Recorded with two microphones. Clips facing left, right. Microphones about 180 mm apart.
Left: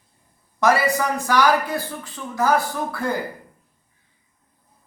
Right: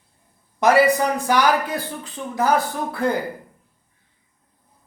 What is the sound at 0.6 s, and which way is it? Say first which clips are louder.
Speech: right 3 dB; 15° right (ahead or behind).